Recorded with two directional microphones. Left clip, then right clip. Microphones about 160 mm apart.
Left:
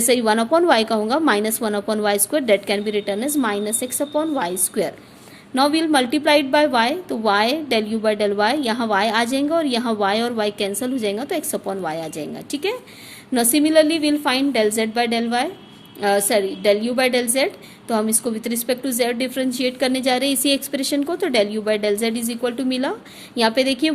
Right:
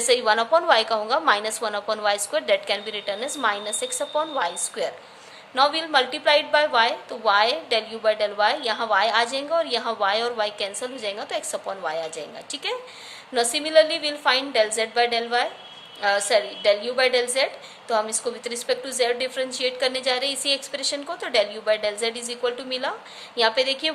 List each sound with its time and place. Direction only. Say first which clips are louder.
0.0 s a woman's voice: left 2 dB; 40° left (ahead or behind)